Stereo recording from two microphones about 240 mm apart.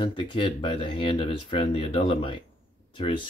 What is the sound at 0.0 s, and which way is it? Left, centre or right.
Speech, centre.